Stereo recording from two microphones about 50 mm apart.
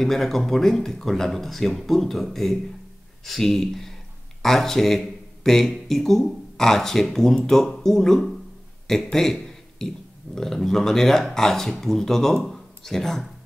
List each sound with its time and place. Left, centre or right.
0.0 s speech: centre